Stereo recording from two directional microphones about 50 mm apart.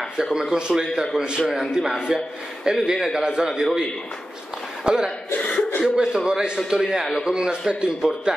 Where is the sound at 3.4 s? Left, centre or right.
Centre.